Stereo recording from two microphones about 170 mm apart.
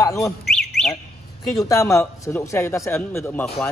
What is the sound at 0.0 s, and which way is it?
Bird, 20° left (ahead or behind).